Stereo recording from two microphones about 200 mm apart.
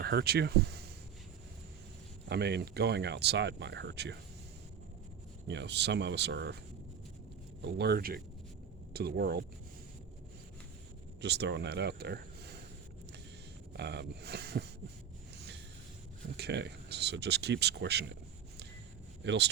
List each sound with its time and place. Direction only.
0.0 s speech: 55° right (ahead or behind)
2.3 s speech: 55° right (ahead or behind)
5.5 s speech: 60° right (ahead or behind)
7.6 s speech: 55° right (ahead or behind)
11.2 s speech: 60° right (ahead or behind)
13.7 s speech: 55° right (ahead or behind)
16.4 s speech: 55° right (ahead or behind)
19.2 s speech: 60° right (ahead or behind)